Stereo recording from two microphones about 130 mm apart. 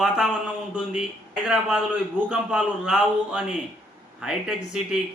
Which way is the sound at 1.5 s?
5° right (ahead or behind).